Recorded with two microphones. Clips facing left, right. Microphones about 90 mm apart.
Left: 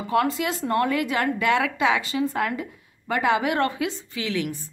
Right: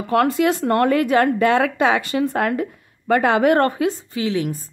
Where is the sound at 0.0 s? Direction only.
55° right (ahead or behind); by 4.5 s 30° right (ahead or behind).